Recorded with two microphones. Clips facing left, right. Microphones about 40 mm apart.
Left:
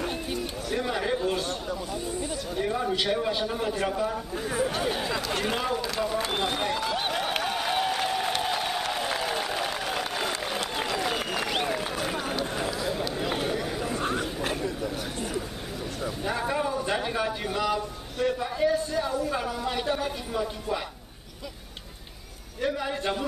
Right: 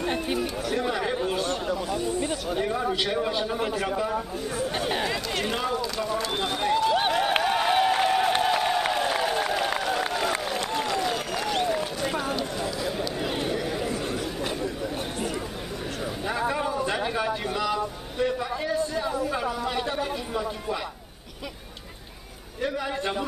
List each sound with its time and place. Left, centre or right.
0.1 s chatter: right
0.7 s chatter: centre
2.1 s speech: right
2.6 s a man's voice: centre
4.5 s speech: centre
4.7 s speech: right
5.5 s speech: centre
5.8 s speech: centre
6.7 s a sound: centre
10.9 s applause: centre
13.2 s chatter: centre
14.0 s chatter: left
16.3 s a sound: centre
22.6 s a man's voice: centre